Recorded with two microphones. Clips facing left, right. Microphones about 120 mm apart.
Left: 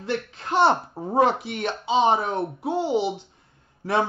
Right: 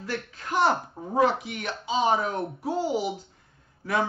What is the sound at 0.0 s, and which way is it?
Speech, 25° left (ahead or behind).